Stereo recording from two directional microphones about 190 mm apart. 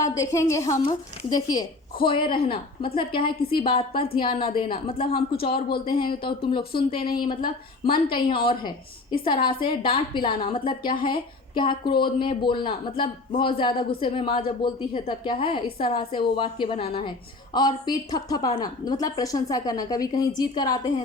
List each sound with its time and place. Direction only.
0.0 s a woman's voice: 15° left (ahead or behind)